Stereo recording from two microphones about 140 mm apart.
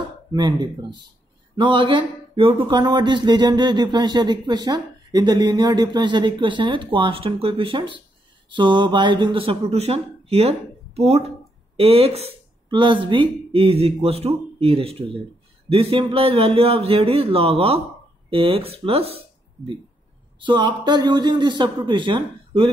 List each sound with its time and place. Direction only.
0.3 s speech: 30° right (ahead or behind)
12.6 s speech: 35° right (ahead or behind)